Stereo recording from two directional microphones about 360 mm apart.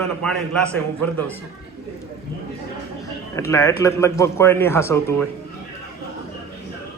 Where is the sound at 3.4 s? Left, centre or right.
Centre.